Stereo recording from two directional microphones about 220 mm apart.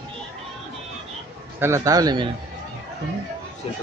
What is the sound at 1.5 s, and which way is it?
Speech, 10° right (ahead or behind).